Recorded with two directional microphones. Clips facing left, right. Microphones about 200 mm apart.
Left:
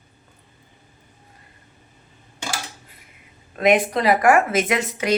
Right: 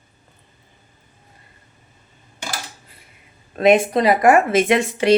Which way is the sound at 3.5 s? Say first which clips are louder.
Right 3 dB; 30° right (ahead or behind).